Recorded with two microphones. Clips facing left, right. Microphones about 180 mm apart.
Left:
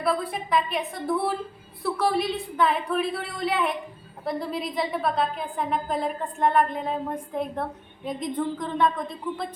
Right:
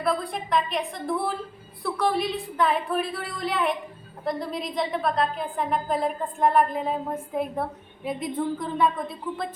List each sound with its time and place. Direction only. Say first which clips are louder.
0.0 s a woman's voice: even; 5° left (ahead or behind)